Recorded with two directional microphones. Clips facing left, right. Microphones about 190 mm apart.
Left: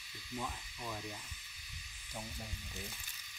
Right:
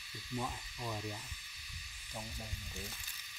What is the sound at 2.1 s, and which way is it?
Speech, centre (ahead or behind).